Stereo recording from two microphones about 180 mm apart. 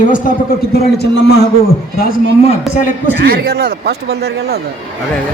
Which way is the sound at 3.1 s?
70° right (ahead or behind).